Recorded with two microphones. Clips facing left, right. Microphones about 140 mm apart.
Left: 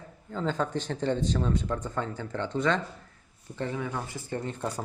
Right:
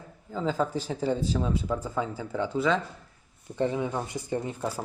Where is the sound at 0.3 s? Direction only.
5° right (ahead or behind).